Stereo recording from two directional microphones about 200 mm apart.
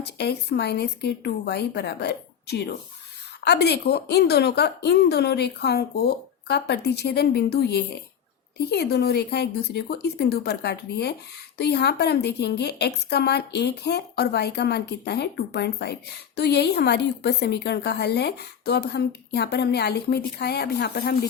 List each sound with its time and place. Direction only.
0.0 s a woman's voice: 55° left (ahead or behind)